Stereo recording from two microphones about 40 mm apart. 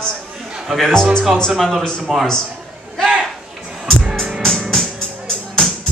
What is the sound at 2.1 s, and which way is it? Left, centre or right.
Speech, centre.